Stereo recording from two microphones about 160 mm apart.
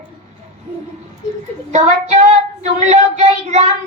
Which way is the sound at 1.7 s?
45° right (ahead or behind).